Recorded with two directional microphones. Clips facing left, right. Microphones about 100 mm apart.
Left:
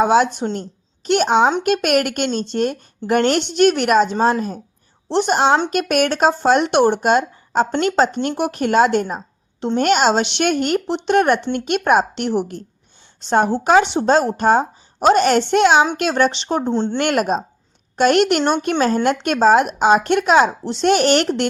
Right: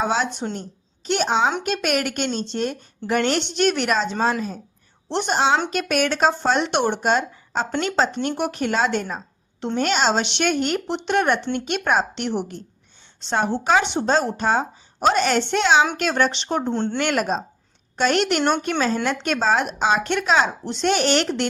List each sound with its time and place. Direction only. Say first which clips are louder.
0.0 s speech: left 8 dB; 45° left (ahead or behind)
1.0 s speech: left 5 dB; 55° left (ahead or behind)
5.0 s a woman's voice: left 6 dB; 35° left (ahead or behind)
5.7 s speech: left 4 dB; 50° left (ahead or behind)
16.7 s speech: left 4 dB; 20° left (ahead or behind)
17.0 s speech: left 4 dB; 50° left (ahead or behind)